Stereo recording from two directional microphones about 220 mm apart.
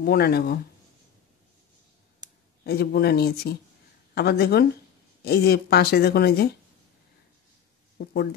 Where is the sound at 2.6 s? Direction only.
45° left (ahead or behind).